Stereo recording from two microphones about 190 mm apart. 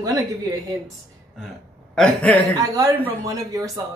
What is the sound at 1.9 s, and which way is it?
Speech, 5° left (ahead or behind).